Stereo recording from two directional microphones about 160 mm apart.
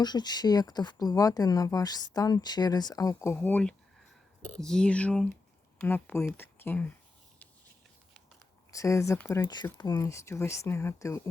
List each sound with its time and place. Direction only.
0.0 s speech: 25° left (ahead or behind)
8.7 s speech: 20° left (ahead or behind)